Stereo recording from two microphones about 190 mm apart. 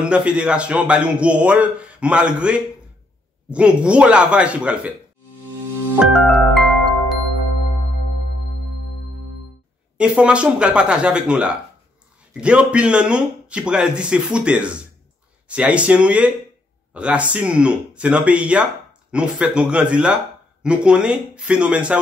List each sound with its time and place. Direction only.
0.0 s speech: 5° right (ahead or behind)
5.9 s music: 5° left (ahead or behind)
9.9 s speech: 5° right (ahead or behind)